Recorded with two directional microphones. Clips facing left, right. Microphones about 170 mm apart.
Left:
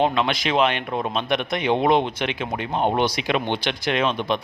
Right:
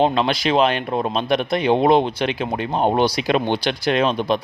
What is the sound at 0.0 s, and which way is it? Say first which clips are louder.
A man's voice: right 3 dB; 35° right (ahead or behind).